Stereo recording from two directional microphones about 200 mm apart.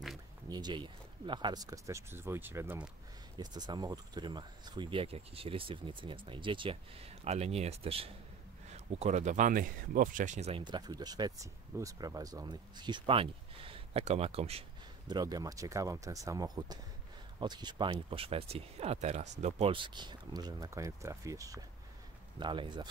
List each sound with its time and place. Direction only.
0.5 s speech: 20° right (ahead or behind)
15.0 s speech: 20° right (ahead or behind)